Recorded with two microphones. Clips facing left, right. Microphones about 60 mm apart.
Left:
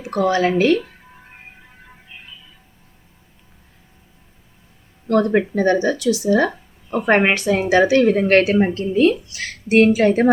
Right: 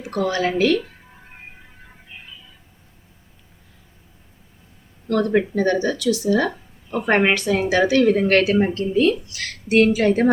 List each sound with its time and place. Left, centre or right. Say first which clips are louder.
0.1 s a woman's voice: left 4 dB; left
5.0 s a woman's voice: left 2 dB; left
8.3 s a woman's voice: left 2 dB; left